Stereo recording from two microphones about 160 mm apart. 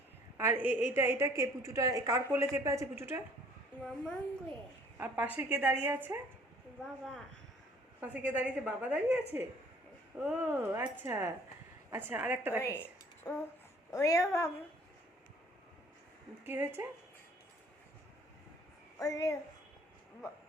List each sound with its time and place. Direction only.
0.3 s a woman's voice: 15° right (ahead or behind)
3.8 s speech: 5° left (ahead or behind)
4.9 s a woman's voice: 10° right (ahead or behind)
8.0 s a woman's voice: 10° right (ahead or behind)
13.2 s a sound: 5° left (ahead or behind)
13.9 s a woman's voice: 20° left (ahead or behind)
16.4 s a woman's voice: 15° right (ahead or behind)
18.9 s a woman's voice: 20° left (ahead or behind)
20.2 s a sound: 15° left (ahead or behind)